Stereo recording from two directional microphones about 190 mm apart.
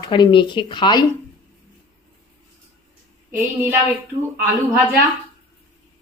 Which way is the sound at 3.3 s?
10° right (ahead or behind).